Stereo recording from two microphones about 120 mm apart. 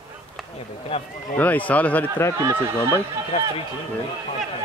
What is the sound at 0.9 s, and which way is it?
Speech, 55° left (ahead or behind).